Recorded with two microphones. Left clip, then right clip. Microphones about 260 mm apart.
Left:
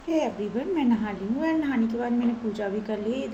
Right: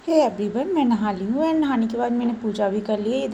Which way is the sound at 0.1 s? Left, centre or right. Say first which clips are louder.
Right 7 dB; right.